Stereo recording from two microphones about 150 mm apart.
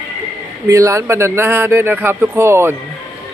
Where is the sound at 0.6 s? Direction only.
20° right (ahead or behind).